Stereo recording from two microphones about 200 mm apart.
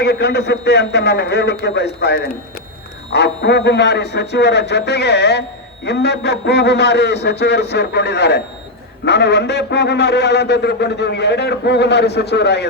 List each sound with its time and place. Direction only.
0.0 s a man's voice: 55° left (ahead or behind)